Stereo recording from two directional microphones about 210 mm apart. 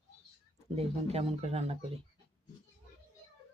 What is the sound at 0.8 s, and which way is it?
Speech, 30° right (ahead or behind).